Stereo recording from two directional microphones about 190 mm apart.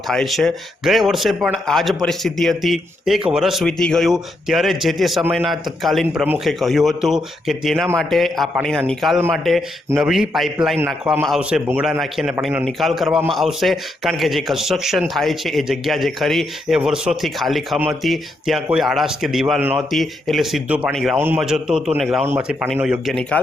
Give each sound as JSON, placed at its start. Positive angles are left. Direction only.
{"t": 0.1, "sound": "a man's voice", "side_deg": 0}